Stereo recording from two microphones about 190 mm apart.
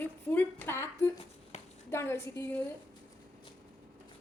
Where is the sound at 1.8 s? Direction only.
15° left (ahead or behind).